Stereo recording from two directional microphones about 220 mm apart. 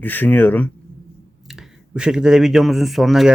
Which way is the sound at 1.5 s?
5° right (ahead or behind).